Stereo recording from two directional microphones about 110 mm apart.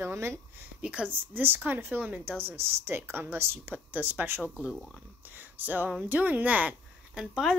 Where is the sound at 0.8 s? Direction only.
10° right (ahead or behind).